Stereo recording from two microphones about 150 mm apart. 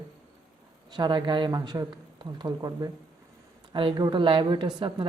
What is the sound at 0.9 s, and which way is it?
Speech, 30° right (ahead or behind).